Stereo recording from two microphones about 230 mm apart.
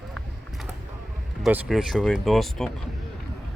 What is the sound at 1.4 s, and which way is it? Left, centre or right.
Speech, centre.